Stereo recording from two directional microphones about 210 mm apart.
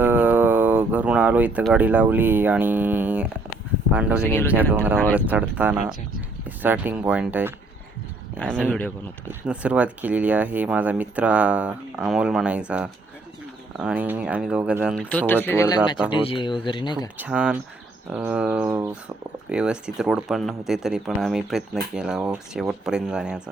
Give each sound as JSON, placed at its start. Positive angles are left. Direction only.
{"t": 0.0, "sound": "speech", "side_deg": -10}
{"t": 4.3, "sound": "speech", "side_deg": 10}
{"t": 5.1, "sound": "speech", "side_deg": -5}
{"t": 9.5, "sound": "speech", "side_deg": -5}
{"t": 15.1, "sound": "speech", "side_deg": 10}
{"t": 16.2, "sound": "speech", "side_deg": 25}
{"t": 17.2, "sound": "speech", "side_deg": -5}